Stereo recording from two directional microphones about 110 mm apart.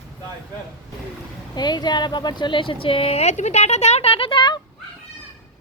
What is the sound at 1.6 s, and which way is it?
Speech, 40° left (ahead or behind).